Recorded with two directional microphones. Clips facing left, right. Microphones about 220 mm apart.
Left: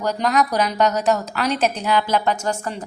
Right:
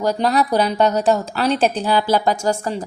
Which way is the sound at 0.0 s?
30° right (ahead or behind).